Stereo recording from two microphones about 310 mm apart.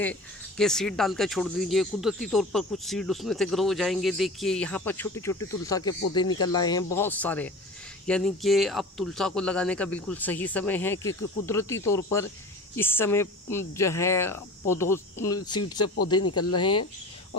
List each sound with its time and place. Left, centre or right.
0.0 s speech: centre
16.2 s speech: left